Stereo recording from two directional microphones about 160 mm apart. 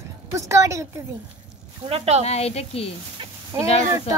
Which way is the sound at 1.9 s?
40° right (ahead or behind).